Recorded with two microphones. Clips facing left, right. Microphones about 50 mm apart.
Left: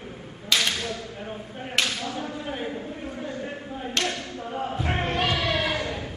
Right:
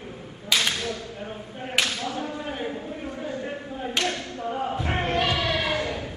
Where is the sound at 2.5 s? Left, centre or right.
Centre.